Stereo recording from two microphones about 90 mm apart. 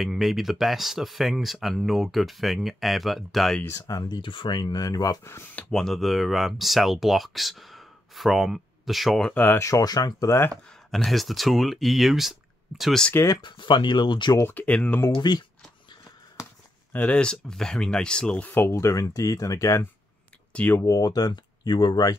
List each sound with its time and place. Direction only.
0.0 s speech: centre (ahead or behind)
3.6 s speech: 40° left (ahead or behind)
4.2 s speech: 65° left (ahead or behind); by 5.2 s 40° left (ahead or behind)
5.2 s speech: 30° left (ahead or behind)
5.7 s speech: 5° left (ahead or behind)
9.3 s speech: 20° left (ahead or behind)
9.6 s speech: 40° left (ahead or behind)
11.1 s speech: centre (ahead or behind)
13.1 s speech: 35° left (ahead or behind)
13.4 s speech: 65° left (ahead or behind)
14.5 s speech: 15° left (ahead or behind)
15.1 s speech: 50° left (ahead or behind)
16.9 s speech: 15° left (ahead or behind)
18.5 s speech: 30° left (ahead or behind); by 22.1 s 50° left (ahead or behind)